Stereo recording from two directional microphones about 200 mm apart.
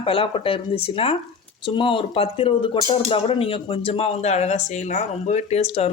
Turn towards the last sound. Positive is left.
turn(degrees=30)  # may be behind; listen again after turning